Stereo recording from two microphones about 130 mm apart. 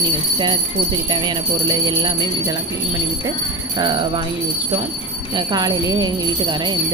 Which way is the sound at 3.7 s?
35° right (ahead or behind).